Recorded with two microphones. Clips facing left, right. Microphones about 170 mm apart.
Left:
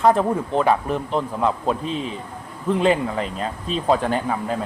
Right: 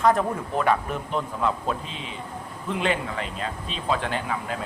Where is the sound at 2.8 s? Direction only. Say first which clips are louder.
Left 6 dB; 35° left (ahead or behind).